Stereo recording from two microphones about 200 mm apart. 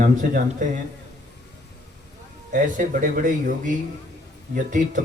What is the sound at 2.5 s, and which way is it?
A man's voice, 45° right (ahead or behind).